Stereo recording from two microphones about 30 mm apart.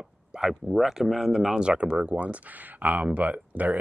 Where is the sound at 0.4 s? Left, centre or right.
Centre.